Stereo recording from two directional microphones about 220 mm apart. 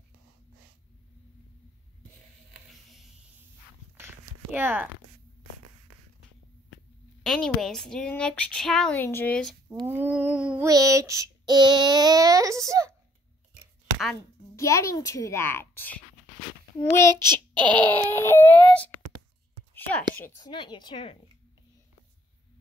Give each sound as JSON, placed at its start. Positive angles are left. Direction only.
{"t": 4.0, "sound": "a sound", "side_deg": -10}
{"t": 7.2, "sound": "a woman's voice", "side_deg": 0}
{"t": 9.7, "sound": "child singing", "side_deg": -10}
{"t": 14.5, "sound": "a child's voice", "side_deg": 15}
{"t": 17.1, "sound": "child singing", "side_deg": -20}
{"t": 17.7, "sound": "a child's voice", "side_deg": 10}
{"t": 19.7, "sound": "a sound", "side_deg": 5}
{"t": 20.2, "sound": "speech", "side_deg": 20}